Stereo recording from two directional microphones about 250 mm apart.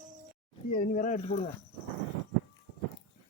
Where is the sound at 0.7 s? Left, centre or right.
Left.